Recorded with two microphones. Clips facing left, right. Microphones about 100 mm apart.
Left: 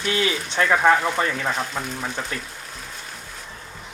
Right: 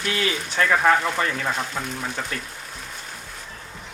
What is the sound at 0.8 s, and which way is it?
Speech, centre (ahead or behind).